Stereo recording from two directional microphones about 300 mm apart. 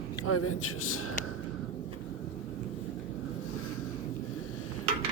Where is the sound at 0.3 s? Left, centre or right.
Left.